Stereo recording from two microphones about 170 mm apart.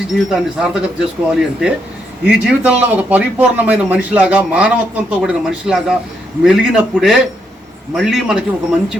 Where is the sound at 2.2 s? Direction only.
10° right (ahead or behind).